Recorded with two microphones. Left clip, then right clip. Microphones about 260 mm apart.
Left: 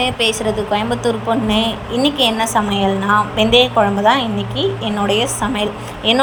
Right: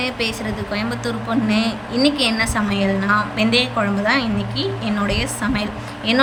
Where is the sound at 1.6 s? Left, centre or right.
Right.